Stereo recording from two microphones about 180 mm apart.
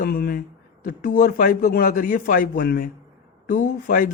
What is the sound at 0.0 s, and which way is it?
Speech, 55° left (ahead or behind).